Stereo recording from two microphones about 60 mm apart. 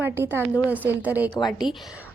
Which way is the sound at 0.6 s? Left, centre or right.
Right.